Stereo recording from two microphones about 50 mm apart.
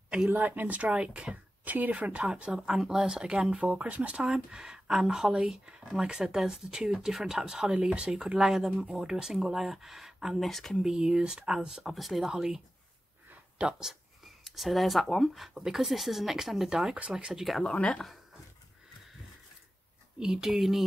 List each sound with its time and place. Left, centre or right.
0.3 s speech: right
1.6 s speech: right
2.5 s speech: centre
3.5 s speech: right; by 7.7 s centre
7.7 s speech: right
10.5 s speech: centre
10.8 s speech: centre
17.5 s speech: centre
20.2 s speech: centre